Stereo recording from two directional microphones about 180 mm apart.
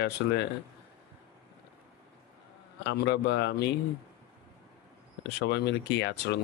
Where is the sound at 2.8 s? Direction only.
75° left (ahead or behind).